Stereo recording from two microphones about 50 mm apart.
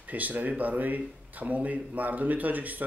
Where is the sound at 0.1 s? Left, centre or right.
Right.